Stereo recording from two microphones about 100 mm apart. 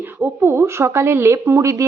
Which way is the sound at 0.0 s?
25° right (ahead or behind).